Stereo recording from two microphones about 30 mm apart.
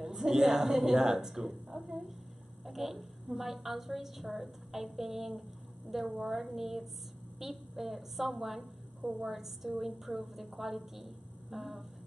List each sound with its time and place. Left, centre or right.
0.0 s a woman's voice: centre
2.6 s a woman's voice: centre
11.5 s a sound: centre